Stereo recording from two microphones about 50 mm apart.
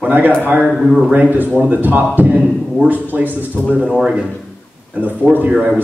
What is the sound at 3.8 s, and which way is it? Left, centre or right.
Speech, centre.